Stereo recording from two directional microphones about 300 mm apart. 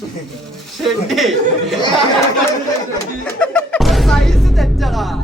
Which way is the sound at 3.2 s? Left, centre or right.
Centre.